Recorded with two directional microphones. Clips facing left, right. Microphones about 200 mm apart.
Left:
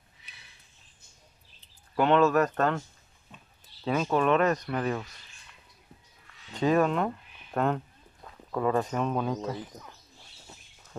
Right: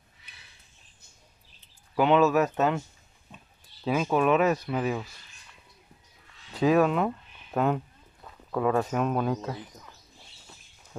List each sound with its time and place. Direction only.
2.0 s speech: 5° right (ahead or behind)
3.8 s speech: 5° right (ahead or behind)
6.5 s speech: 5° right (ahead or behind)